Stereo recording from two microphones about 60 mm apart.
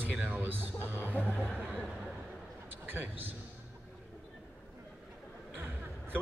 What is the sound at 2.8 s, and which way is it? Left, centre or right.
Speech, right.